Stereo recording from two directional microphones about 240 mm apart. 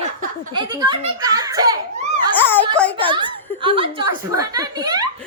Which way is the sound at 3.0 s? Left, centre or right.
Right.